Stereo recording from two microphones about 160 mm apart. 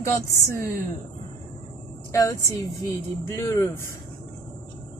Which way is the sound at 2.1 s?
20° left (ahead or behind).